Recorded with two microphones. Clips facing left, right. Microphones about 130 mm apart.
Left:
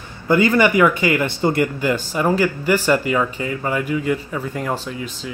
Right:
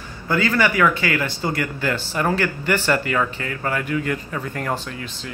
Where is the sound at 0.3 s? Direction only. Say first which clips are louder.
Left 5 dB; 15° left (ahead or behind).